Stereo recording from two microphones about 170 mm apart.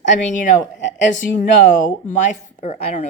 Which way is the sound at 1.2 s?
50° left (ahead or behind).